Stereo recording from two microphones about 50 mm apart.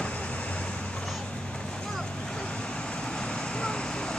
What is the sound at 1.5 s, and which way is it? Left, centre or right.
Vehicle, centre.